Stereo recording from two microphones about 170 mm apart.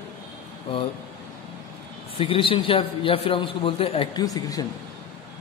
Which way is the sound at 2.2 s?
30° left (ahead or behind).